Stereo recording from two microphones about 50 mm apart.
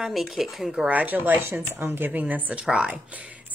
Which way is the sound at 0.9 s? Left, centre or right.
Right.